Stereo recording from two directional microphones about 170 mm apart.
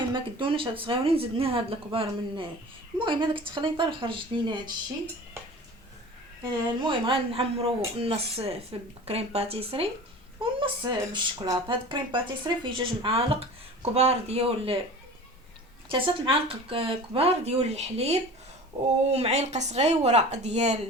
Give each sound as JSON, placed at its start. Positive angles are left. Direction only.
{"t": 0.1, "sound": "speech", "side_deg": -30}
{"t": 6.4, "sound": "speech", "side_deg": -30}
{"t": 15.9, "sound": "speech", "side_deg": -30}
{"t": 19.1, "sound": "speech", "side_deg": -40}